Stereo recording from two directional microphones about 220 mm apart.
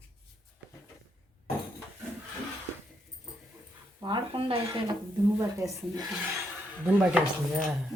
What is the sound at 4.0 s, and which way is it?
Speech, 20° right (ahead or behind).